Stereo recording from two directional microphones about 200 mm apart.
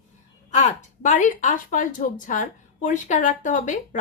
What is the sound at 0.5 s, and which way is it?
A woman's voice, 35° left (ahead or behind).